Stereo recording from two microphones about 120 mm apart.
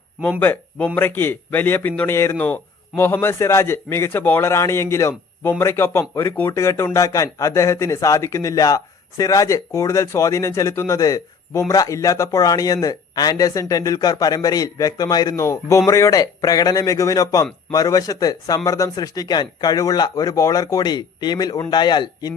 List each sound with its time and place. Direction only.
0.2 s a man's voice: 10° left (ahead or behind); by 22.4 s 35° left (ahead or behind)